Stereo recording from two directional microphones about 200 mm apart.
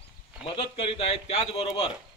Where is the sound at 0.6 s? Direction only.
30° left (ahead or behind).